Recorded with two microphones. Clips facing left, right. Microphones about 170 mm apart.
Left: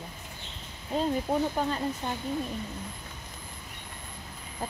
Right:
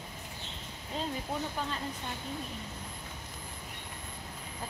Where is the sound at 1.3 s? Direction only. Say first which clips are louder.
Left 8 dB; 45° left (ahead or behind).